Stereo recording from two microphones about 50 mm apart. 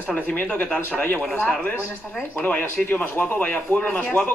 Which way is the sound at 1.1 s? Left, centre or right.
Centre.